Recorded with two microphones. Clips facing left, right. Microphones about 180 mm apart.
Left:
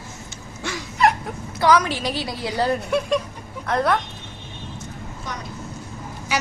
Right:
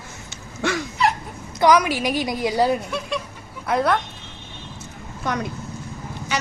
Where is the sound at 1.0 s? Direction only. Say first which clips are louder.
Left 3 dB; 50° left (ahead or behind).